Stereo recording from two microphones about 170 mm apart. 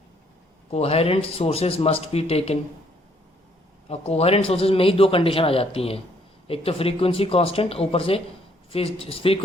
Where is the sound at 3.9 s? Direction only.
35° left (ahead or behind).